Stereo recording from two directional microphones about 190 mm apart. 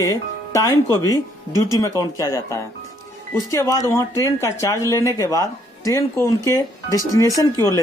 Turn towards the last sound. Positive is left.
turn(degrees=15)  # may be behind; listen again after turning